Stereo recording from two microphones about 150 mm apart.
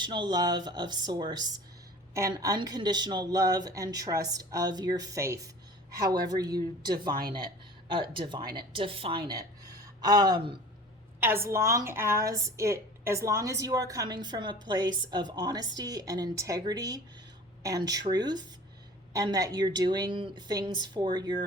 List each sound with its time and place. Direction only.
0.0 s a woman's voice: 30° right (ahead or behind)
11.2 s a woman's voice: 15° right (ahead or behind)